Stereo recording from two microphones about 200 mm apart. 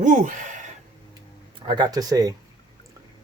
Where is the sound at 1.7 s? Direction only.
20° right (ahead or behind).